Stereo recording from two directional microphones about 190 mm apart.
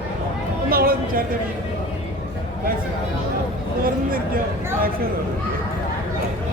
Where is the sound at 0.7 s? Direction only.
50° right (ahead or behind).